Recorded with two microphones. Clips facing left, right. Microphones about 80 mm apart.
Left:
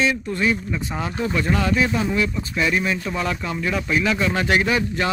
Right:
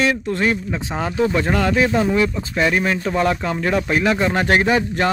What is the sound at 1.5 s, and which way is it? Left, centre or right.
Speech, right.